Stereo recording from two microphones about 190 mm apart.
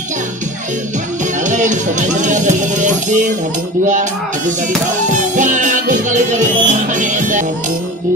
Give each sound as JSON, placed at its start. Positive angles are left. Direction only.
{"t": 1.4, "sound": "speech", "side_deg": -40}
{"t": 5.1, "sound": "music", "side_deg": -40}